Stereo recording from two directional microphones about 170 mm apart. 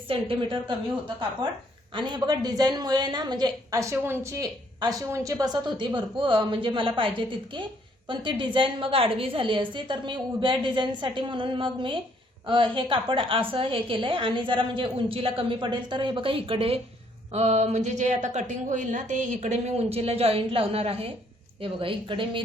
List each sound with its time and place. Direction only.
0.1 s a woman's voice: 30° right (ahead or behind)